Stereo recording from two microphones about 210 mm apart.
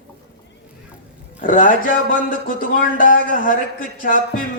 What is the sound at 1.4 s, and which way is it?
Speech, 40° left (ahead or behind).